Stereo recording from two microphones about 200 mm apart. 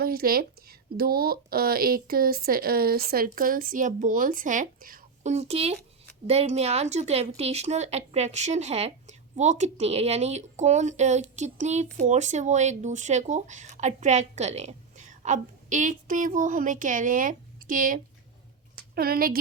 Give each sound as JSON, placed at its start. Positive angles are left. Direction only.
{"t": 0.0, "sound": "a woman's voice", "side_deg": -50}